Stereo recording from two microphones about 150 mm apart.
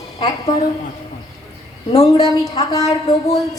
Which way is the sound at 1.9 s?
45° left (ahead or behind).